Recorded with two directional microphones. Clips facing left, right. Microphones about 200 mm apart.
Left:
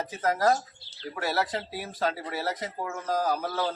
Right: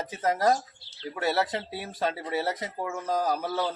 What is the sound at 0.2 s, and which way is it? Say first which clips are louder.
Speech: even; 20° right (ahead or behind).